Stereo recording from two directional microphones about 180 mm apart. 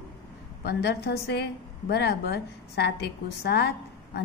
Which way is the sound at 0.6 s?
65° left (ahead or behind).